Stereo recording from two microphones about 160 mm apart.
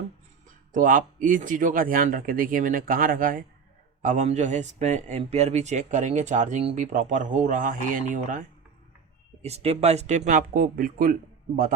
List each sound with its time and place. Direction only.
0.7 s speech: 55° right (ahead or behind)
4.0 s a man's voice: 50° right (ahead or behind)
9.4 s speech: 40° right (ahead or behind); by 11.7 s 65° right (ahead or behind)